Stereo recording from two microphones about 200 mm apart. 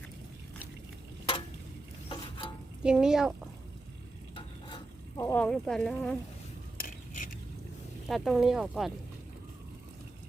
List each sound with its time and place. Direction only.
2.8 s speech: 5° right (ahead or behind)
4.4 s stir: 20° left (ahead or behind); by 6.1 s 5° left (ahead or behind)
6.7 s mechanisms: 45° left (ahead or behind)
8.0 s speech: centre (ahead or behind)